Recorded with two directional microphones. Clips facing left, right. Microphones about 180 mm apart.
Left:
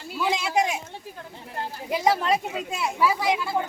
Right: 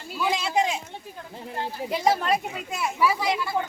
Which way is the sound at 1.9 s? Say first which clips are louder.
Left 1 dB; 10° left (ahead or behind).